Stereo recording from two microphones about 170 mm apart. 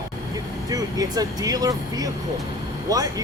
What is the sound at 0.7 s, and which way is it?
Speech, 20° right (ahead or behind).